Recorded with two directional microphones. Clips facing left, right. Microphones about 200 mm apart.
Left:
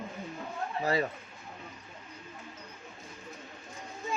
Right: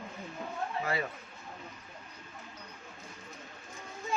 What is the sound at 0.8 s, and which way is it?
Speech, 35° left (ahead or behind).